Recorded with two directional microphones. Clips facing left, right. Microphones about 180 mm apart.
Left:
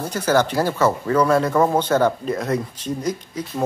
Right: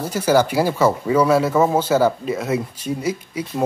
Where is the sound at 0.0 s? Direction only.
10° right (ahead or behind).